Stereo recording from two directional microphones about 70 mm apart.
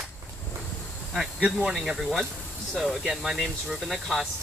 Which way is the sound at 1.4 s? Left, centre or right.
Centre.